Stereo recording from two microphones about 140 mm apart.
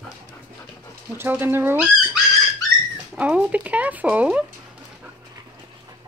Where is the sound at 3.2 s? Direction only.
10° right (ahead or behind).